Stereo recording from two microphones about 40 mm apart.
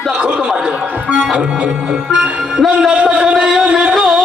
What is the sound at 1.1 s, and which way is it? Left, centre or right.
Music, right.